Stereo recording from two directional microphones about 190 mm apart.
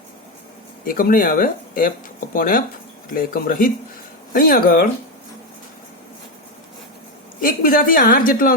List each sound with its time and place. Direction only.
0.9 s a woman's voice: 50° left (ahead or behind)
7.4 s a woman's voice: 50° left (ahead or behind)